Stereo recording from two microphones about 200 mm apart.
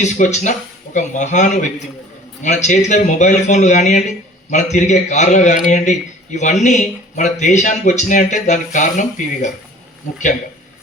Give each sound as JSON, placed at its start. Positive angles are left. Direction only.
{"t": 0.0, "sound": "speech", "side_deg": 35}